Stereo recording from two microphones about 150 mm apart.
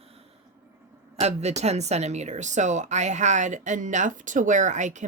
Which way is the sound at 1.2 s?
45° right (ahead or behind).